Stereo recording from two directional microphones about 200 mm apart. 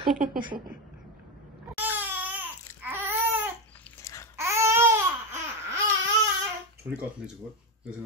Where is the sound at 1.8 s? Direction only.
10° right (ahead or behind).